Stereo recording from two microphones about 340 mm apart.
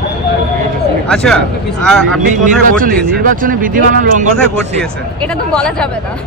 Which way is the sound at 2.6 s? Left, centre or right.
Right.